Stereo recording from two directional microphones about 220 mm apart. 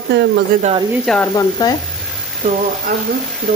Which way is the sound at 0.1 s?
50° right (ahead or behind).